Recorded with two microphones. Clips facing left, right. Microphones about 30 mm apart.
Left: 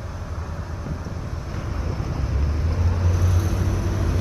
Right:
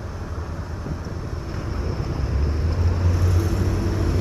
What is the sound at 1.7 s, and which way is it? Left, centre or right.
Vehicle, right.